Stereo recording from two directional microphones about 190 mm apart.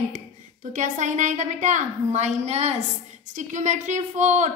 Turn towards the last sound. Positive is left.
turn(degrees=-40)  # may be behind; listen again after turning